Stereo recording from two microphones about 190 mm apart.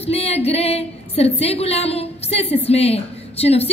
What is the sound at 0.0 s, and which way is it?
A woman's voice, 30° left (ahead or behind).